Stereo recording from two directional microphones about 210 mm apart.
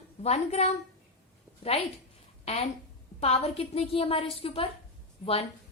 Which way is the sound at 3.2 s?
30° left (ahead or behind).